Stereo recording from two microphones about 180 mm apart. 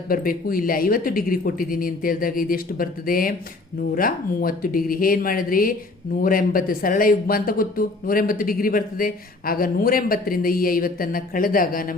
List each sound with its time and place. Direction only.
0.1 s speech: 50° left (ahead or behind)